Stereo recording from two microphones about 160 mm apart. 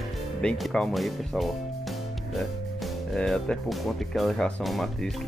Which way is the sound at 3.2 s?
5° left (ahead or behind).